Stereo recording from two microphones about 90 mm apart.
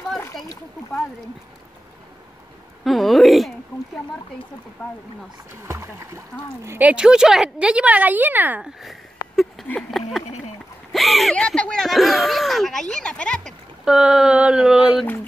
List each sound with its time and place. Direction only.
2.8 s a sound: centre (ahead or behind)
5.7 s speech: 30° right (ahead or behind)
6.8 s a woman's voice: 10° right (ahead or behind)
9.8 s speech: centre (ahead or behind)
10.9 s a sound: centre (ahead or behind)
13.8 s a woman's voice: 5° right (ahead or behind)